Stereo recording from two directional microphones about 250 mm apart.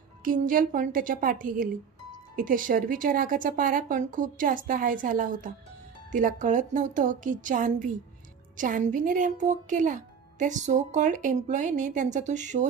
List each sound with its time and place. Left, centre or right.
0.2 s speech: right